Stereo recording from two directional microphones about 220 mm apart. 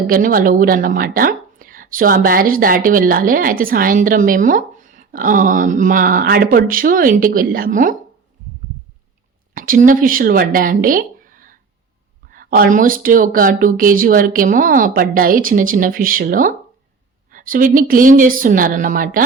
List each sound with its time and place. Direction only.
0.1 s speech: 40° right (ahead or behind)
9.6 s speech: 40° right (ahead or behind)